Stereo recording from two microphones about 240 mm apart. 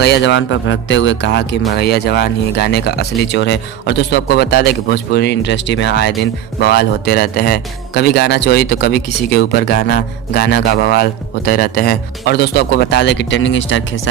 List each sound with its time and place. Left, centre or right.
0.0 s speech: left